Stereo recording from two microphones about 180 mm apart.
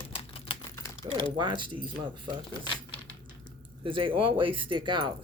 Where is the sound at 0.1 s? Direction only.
30° left (ahead or behind).